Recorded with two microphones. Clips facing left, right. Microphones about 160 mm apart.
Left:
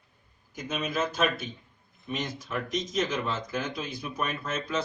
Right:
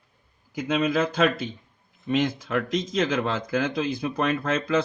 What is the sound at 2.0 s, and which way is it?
Speech, 75° right (ahead or behind).